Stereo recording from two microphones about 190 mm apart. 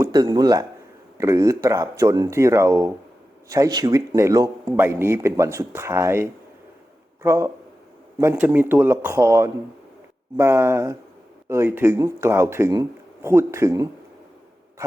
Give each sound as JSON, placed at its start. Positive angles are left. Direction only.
{"t": 0.0, "sound": "speech", "side_deg": -20}